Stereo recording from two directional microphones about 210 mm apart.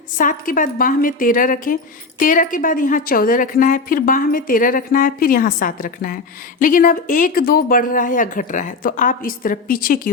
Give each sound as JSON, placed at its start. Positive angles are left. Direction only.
{"t": 0.2, "sound": "speech", "side_deg": 40}